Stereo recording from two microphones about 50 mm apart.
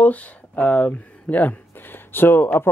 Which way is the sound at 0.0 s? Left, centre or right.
Left.